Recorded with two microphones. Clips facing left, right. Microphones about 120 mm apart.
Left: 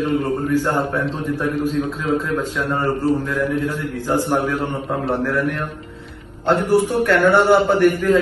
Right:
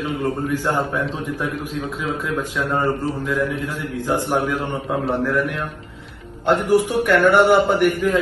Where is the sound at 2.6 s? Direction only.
15° right (ahead or behind).